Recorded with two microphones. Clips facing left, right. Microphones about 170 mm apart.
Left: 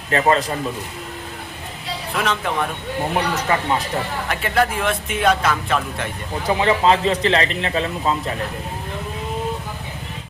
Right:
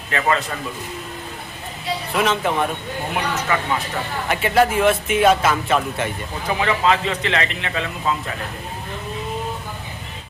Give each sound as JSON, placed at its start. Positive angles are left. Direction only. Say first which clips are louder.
{"t": 0.1, "sound": "a man's voice", "louder": "left 4 dB", "side_deg": 35}
{"t": 2.1, "sound": "speech", "louder": "right 2 dB", "side_deg": -5}
{"t": 3.5, "sound": "a man's voice", "louder": "left 2 dB", "side_deg": 35}
{"t": 4.3, "sound": "speech", "louder": "right 4 dB", "side_deg": -5}
{"t": 6.5, "sound": "a man's voice", "louder": "left 3 dB", "side_deg": 30}